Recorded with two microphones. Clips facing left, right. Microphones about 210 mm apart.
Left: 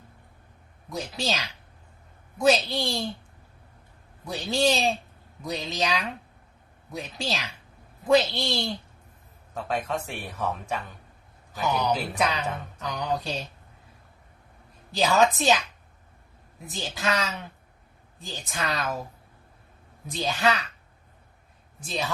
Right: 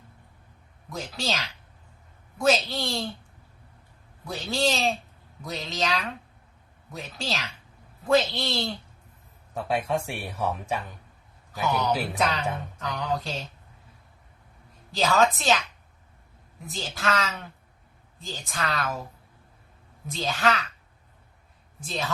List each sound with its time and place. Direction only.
0.9 s a woman's voice: 15° left (ahead or behind)
4.3 s a woman's voice: 15° left (ahead or behind)
9.6 s speech: 10° right (ahead or behind)
11.6 s a woman's voice: 15° left (ahead or behind)
14.9 s a woman's voice: 15° left (ahead or behind)
16.7 s a woman's voice: 15° left (ahead or behind)
20.1 s a woman's voice: 15° left (ahead or behind)
21.8 s a woman's voice: 15° left (ahead or behind)